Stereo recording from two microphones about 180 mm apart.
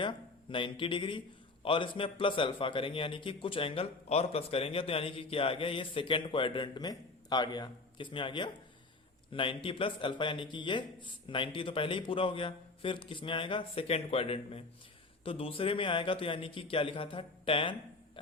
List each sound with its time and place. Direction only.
0.0 s a man's voice: 25° left (ahead or behind)